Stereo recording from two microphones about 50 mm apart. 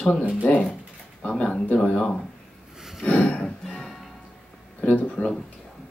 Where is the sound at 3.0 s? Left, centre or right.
Left.